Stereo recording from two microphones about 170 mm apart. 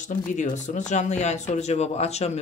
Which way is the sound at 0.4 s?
45° left (ahead or behind).